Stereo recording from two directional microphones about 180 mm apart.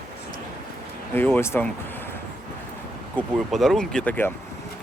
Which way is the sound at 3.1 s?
Centre (ahead or behind).